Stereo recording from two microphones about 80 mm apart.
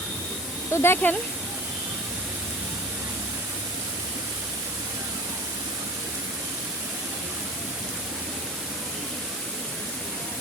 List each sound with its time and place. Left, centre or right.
0.7 s speech: left